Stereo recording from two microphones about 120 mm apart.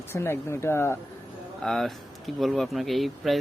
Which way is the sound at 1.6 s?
Centre (ahead or behind).